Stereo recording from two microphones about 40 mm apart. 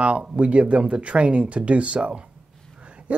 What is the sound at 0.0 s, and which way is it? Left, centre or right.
Speech, right.